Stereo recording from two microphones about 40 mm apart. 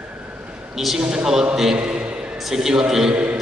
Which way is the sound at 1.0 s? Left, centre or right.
Right.